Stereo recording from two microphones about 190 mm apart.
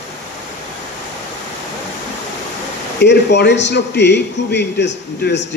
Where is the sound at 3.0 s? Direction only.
65° left (ahead or behind).